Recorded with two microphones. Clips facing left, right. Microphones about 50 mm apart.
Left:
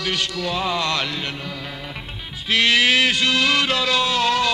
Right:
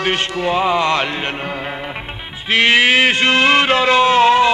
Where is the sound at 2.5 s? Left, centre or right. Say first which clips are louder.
Right 5 dB; right.